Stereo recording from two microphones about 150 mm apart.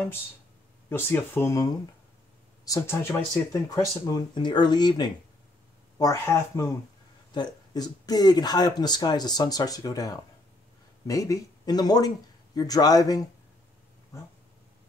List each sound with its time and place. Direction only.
0.8 s speech: 15° left (ahead or behind)